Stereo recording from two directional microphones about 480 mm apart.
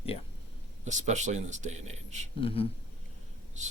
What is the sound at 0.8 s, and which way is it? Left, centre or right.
Speech, centre.